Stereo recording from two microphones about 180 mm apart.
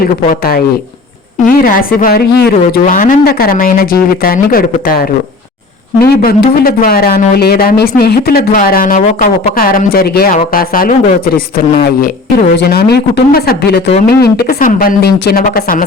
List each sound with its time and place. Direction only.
0.0 s speech: 55° left (ahead or behind)